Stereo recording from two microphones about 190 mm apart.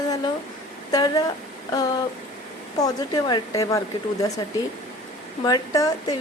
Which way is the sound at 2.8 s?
20° left (ahead or behind).